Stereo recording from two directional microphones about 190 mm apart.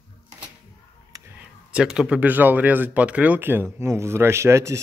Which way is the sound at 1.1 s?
20° right (ahead or behind).